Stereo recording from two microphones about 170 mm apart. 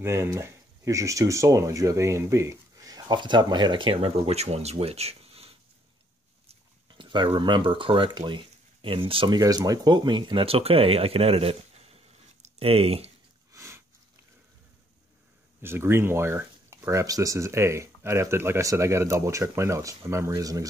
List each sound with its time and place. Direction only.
0.0 s speech: 15° right (ahead or behind); by 5.6 s 35° right (ahead or behind)
6.9 s speech: 30° right (ahead or behind)
13.5 s sniff: 15° right (ahead or behind)
15.6 s speech: 15° right (ahead or behind)